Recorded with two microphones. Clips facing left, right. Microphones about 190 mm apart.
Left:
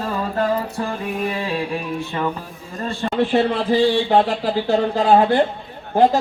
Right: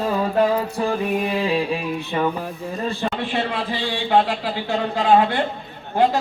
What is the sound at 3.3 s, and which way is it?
Speech, 40° left (ahead or behind).